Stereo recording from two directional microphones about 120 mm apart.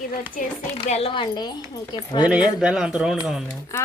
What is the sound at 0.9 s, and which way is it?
Speech, 55° left (ahead or behind).